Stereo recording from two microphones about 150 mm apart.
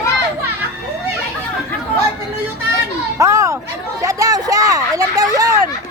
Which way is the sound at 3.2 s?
20° right (ahead or behind).